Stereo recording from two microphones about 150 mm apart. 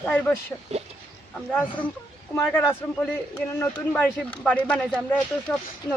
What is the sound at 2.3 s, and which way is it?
Speech, 15° left (ahead or behind).